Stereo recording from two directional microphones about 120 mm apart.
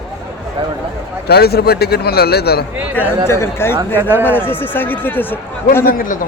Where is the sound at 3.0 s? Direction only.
20° left (ahead or behind).